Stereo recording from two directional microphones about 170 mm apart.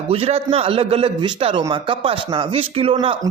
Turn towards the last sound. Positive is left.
turn(degrees=-30)  # may be behind; listen again after turning